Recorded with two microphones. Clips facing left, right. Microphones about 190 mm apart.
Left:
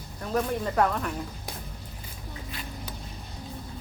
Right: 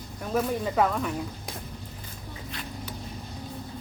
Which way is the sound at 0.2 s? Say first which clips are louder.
Right 1 dB; 5° right (ahead or behind).